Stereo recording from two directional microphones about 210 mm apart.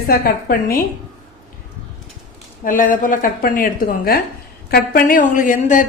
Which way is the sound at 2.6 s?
40° left (ahead or behind).